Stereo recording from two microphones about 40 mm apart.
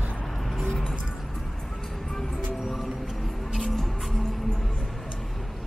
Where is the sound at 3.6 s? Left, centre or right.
Centre.